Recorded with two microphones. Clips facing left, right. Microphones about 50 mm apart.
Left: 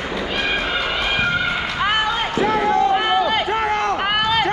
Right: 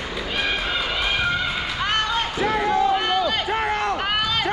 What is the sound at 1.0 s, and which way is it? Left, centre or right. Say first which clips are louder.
Run: left 3 dB; centre.